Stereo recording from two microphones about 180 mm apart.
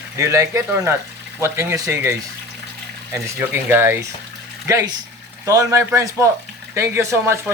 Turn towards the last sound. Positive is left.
turn(degrees=-15)  # may be behind; listen again after turning